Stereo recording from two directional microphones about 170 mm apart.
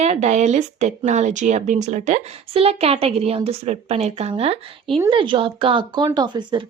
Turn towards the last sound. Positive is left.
turn(degrees=-25)  # may be behind; listen again after turning